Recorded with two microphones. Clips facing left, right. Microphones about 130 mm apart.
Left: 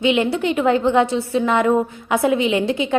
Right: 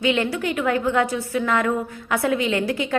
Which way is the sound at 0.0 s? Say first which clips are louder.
Left 4 dB; 20° left (ahead or behind).